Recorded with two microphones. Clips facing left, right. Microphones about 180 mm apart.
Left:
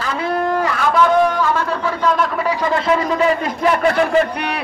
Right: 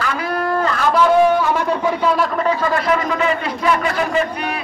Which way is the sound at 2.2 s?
5° left (ahead or behind).